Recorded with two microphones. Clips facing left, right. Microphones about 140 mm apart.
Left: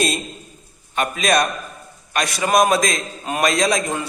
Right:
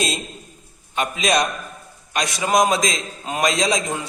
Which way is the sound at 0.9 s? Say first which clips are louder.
Left 1 dB; 20° right (ahead or behind).